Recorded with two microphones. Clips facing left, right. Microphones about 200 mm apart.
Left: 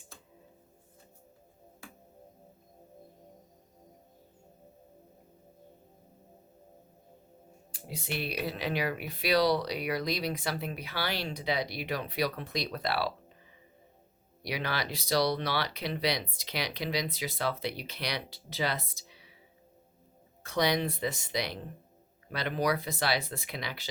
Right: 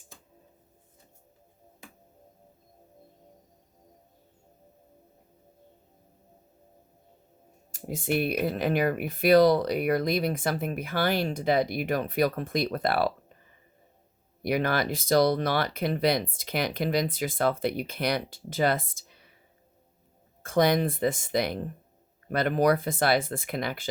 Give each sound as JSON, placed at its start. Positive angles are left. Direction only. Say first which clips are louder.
{"t": 1.8, "sound": "music", "louder": "even", "side_deg": -20}
{"t": 7.7, "sound": "speech", "louder": "right 10 dB", "side_deg": -50}
{"t": 14.4, "sound": "speech", "louder": "right 8 dB", "side_deg": -50}
{"t": 20.4, "sound": "speech", "louder": "right 6 dB", "side_deg": -50}